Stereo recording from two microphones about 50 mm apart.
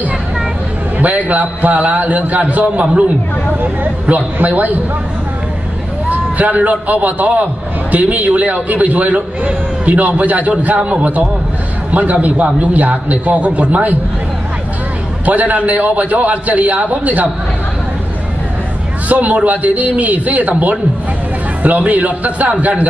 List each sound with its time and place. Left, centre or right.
0.9 s a man's voice: right
6.0 s a man's voice: right
15.2 s a man's voice: right
19.0 s a man's voice: right